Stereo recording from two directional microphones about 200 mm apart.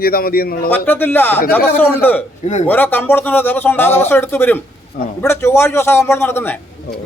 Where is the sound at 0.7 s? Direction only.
10° left (ahead or behind).